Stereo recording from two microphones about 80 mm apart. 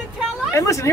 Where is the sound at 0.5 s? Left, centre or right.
Left.